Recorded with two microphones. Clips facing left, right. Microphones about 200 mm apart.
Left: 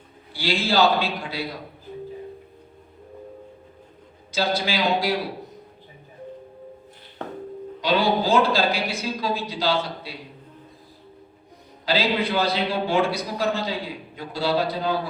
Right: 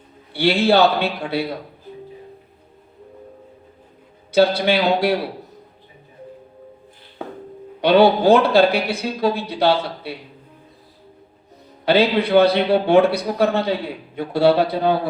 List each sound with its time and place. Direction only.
0.3 s a man's voice: 60° right (ahead or behind)
4.3 s a man's voice: 60° right (ahead or behind)
7.2 s music: 10° right (ahead or behind)
7.8 s a man's voice: 60° right (ahead or behind)
11.9 s a man's voice: 60° right (ahead or behind)